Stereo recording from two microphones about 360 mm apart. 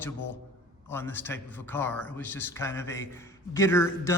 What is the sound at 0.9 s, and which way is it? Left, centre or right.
A man's voice, centre.